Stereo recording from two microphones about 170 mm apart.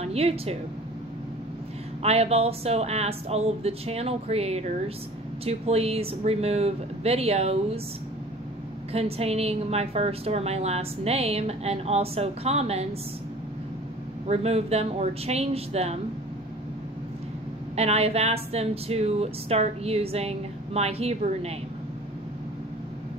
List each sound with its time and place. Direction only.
0.0 s a woman's voice: 35° right (ahead or behind)
2.0 s a woman's voice: 35° right (ahead or behind)
8.9 s a woman's voice: 35° right (ahead or behind)
14.2 s a woman's voice: 40° right (ahead or behind)
17.7 s a woman's voice: 40° right (ahead or behind)